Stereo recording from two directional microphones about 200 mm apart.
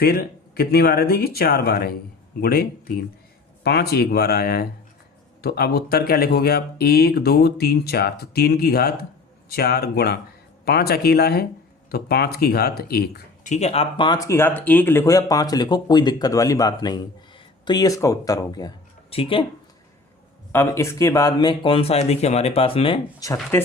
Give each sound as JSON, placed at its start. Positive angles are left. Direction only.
{"t": 0.0, "sound": "speech", "side_deg": 50}
{"t": 13.5, "sound": "speech", "side_deg": 35}
{"t": 20.5, "sound": "speech", "side_deg": 15}
{"t": 23.2, "sound": "speech", "side_deg": 15}